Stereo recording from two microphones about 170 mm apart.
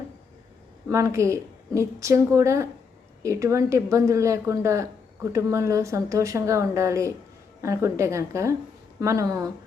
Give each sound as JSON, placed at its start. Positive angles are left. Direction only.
{"t": 0.9, "sound": "speech", "side_deg": -15}